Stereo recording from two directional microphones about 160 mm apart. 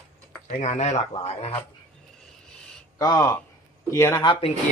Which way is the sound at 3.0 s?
20° left (ahead or behind).